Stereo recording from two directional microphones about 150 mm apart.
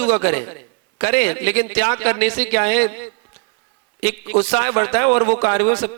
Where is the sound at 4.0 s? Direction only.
20° left (ahead or behind).